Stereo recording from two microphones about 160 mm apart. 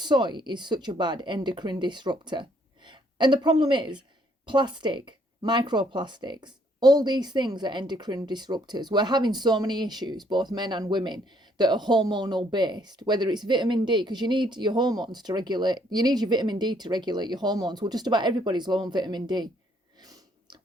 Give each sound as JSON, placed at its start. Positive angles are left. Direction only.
{"t": 0.0, "sound": "speech", "side_deg": -30}